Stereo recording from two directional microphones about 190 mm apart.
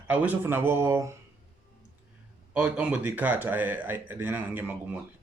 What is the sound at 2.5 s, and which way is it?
Speech, 10° right (ahead or behind).